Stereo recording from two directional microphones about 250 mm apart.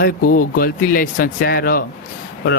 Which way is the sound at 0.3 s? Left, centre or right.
Left.